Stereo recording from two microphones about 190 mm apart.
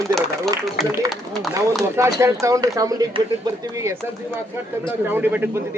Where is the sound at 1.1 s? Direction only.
Centre (ahead or behind).